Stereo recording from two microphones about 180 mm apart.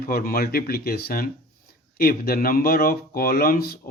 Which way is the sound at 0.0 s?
55° left (ahead or behind).